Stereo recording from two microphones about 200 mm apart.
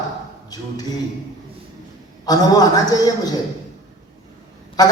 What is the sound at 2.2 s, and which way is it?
Speech, 20° left (ahead or behind).